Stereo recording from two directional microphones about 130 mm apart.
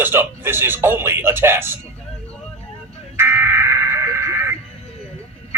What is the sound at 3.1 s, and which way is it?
Buzzer, 15° right (ahead or behind).